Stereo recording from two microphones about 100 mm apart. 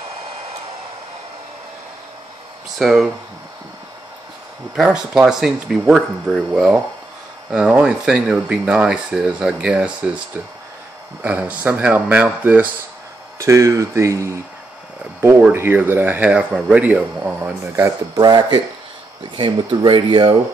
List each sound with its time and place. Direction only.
2.8 s speech: centre (ahead or behind)
4.7 s speech: 5° right (ahead or behind)
11.2 s speech: 15° right (ahead or behind)
13.4 s speech: 30° right (ahead or behind)
15.5 s speech: 20° right (ahead or behind)
17.4 s speech: 25° right (ahead or behind)
18.1 s speech: 45° right (ahead or behind)
19.3 s speech: 55° right (ahead or behind)